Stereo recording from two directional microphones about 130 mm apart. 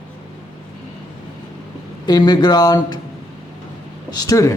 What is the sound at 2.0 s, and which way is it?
Speech, 30° left (ahead or behind).